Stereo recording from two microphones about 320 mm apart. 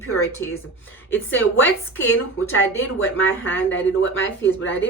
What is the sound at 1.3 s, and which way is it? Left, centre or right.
Speech, left.